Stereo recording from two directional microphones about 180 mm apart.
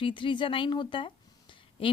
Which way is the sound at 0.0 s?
25° left (ahead or behind).